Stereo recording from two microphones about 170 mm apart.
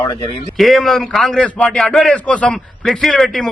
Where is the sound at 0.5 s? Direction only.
Centre (ahead or behind).